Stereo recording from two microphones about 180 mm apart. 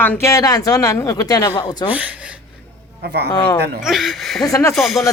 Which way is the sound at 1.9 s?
10° right (ahead or behind).